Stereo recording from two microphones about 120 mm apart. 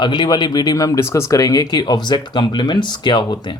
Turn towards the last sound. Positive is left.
turn(degrees=40)  # may be behind; listen again after turning